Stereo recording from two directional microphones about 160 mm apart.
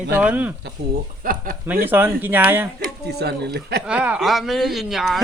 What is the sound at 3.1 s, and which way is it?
Speech, 90° right.